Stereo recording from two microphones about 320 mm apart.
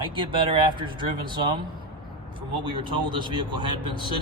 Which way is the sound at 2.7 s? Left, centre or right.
Centre.